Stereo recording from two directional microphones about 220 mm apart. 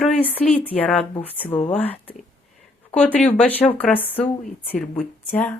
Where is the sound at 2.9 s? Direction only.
5° left (ahead or behind).